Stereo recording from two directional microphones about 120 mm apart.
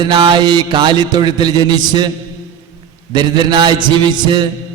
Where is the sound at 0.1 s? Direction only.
40° right (ahead or behind).